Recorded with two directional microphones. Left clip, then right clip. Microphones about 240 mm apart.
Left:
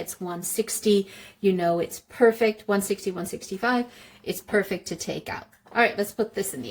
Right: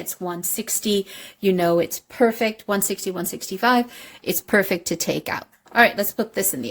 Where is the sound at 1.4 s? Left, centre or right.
Right.